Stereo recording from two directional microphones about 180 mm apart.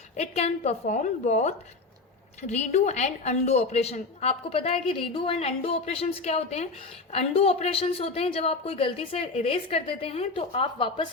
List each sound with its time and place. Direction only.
0.2 s a woman's voice: 35° left (ahead or behind)